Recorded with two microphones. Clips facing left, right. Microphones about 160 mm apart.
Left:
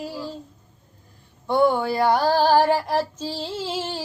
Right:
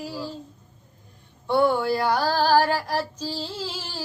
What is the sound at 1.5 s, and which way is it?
Child singing, 15° left (ahead or behind).